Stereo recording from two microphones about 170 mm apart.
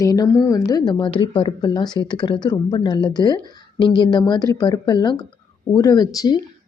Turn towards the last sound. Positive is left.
turn(degrees=25)  # may be behind; listen again after turning